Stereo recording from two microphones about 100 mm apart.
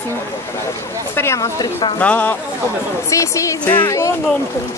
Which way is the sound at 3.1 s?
30° left (ahead or behind).